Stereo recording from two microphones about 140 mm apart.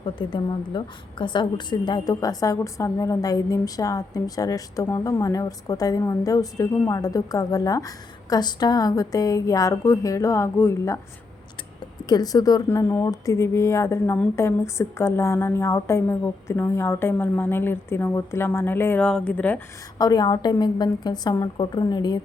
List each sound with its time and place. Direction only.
0.0 s a woman's voice: 35° left (ahead or behind)
12.0 s a woman's voice: 30° left (ahead or behind); by 19.6 s 10° left (ahead or behind)
20.0 s a woman's voice: 25° left (ahead or behind)